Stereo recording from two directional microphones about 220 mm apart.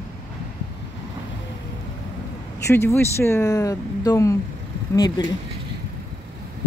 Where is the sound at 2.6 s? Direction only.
10° left (ahead or behind).